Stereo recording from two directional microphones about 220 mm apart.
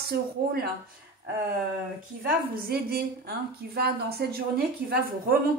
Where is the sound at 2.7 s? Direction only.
45° right (ahead or behind).